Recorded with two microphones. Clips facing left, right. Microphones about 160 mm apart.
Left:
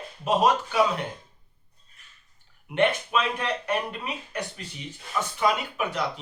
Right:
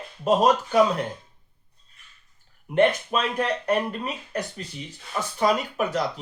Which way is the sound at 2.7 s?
40° right (ahead or behind).